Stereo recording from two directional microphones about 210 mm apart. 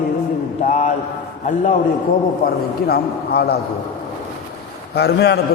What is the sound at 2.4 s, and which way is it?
A man's voice, 45° left (ahead or behind).